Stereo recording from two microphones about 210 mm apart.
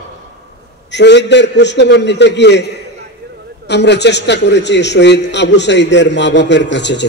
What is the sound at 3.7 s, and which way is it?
A man's voice, 55° left (ahead or behind).